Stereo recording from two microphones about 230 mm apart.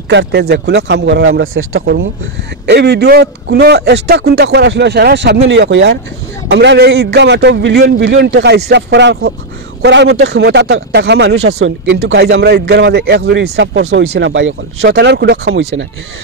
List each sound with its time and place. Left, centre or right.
0.1 s speech: right
2.6 s speech: right
15.5 s speech: right